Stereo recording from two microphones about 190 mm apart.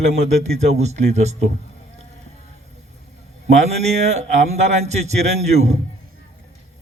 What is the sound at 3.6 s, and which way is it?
A man's voice, 35° right (ahead or behind).